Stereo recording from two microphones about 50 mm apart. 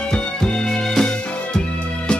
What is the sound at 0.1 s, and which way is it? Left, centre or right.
Music, centre.